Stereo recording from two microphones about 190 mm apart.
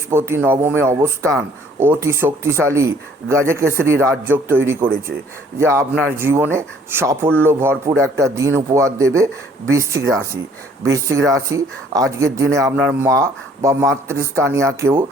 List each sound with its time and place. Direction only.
0.1 s speech: 10° right (ahead or behind)